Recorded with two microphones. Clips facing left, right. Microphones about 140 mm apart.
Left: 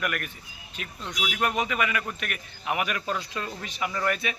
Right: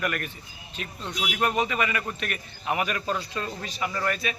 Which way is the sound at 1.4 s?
Centre (ahead or behind).